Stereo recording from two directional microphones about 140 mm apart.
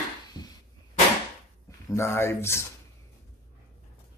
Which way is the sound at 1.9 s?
20° left (ahead or behind).